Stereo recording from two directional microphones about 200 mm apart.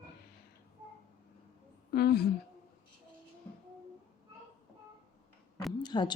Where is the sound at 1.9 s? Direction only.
50° left (ahead or behind).